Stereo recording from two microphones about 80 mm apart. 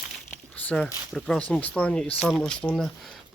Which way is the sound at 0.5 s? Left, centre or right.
Centre.